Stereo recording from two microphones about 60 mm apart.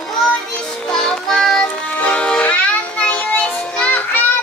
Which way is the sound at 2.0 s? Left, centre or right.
Left.